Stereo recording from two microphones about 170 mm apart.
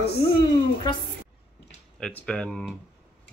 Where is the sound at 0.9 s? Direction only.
25° left (ahead or behind).